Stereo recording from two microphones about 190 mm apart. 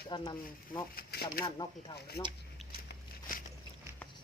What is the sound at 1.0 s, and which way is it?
Speech, 55° left (ahead or behind).